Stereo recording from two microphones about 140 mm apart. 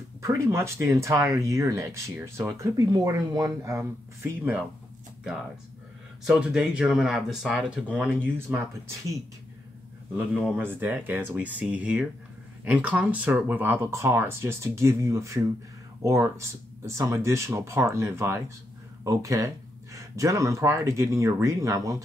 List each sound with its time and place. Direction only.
0.2 s speech: 20° right (ahead or behind)
6.2 s speech: 5° right (ahead or behind)
10.5 s speech: 15° right (ahead or behind)